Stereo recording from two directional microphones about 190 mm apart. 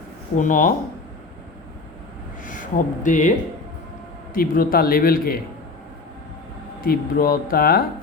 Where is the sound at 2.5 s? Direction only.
45° left (ahead or behind).